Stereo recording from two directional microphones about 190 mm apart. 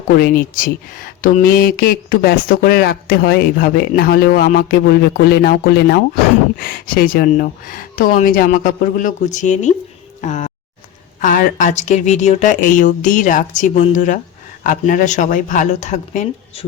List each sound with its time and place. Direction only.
0.2 s speech: 45° left (ahead or behind)
10.2 s a sound: 40° left (ahead or behind)
11.2 s speech: 45° left (ahead or behind)